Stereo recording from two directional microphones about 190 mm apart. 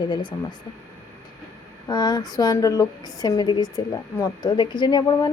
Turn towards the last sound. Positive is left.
turn(degrees=20)  # may be behind; listen again after turning